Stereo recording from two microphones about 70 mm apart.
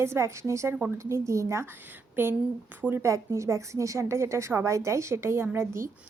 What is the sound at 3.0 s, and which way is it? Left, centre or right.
A woman's voice, right.